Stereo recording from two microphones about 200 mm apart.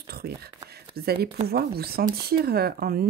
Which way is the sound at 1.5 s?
50° right (ahead or behind).